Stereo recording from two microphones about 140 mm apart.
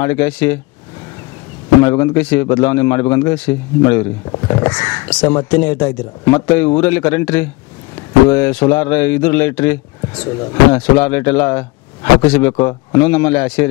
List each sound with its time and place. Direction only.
0.0 s speech: 15° left (ahead or behind)
1.8 s a man's voice: 25° left (ahead or behind)
4.3 s speech: 30° left (ahead or behind)
5.0 s speech: 15° left (ahead or behind)